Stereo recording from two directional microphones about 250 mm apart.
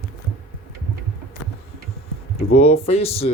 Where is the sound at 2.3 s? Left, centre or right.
Left.